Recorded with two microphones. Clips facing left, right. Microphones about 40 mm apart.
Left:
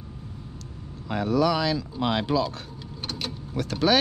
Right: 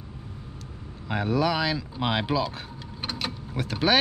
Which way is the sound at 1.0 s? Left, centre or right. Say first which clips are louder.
Left 2 dB; centre.